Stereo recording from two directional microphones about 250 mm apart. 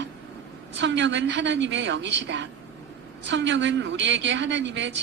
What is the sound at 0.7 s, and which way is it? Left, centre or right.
A woman's voice, right.